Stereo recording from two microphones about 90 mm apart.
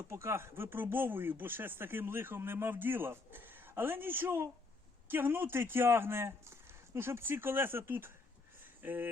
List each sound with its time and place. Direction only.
0.1 s speech: 30° right (ahead or behind)